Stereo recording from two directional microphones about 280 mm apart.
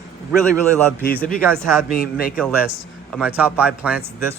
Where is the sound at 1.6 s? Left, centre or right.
Centre.